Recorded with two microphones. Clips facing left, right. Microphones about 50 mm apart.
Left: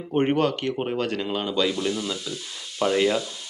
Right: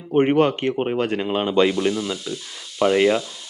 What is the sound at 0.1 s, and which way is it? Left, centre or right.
Speech, centre.